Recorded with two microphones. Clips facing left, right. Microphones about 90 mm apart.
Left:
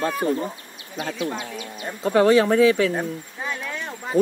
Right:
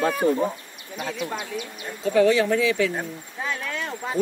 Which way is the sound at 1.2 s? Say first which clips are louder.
Left 1 dB; 10° right (ahead or behind).